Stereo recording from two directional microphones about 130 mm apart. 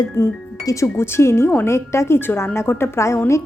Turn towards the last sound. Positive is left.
turn(degrees=20)  # may be behind; listen again after turning